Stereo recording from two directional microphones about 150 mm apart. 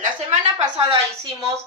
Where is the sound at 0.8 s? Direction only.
30° right (ahead or behind).